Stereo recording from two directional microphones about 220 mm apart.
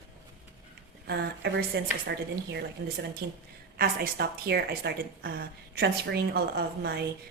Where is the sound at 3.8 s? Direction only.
40° right (ahead or behind).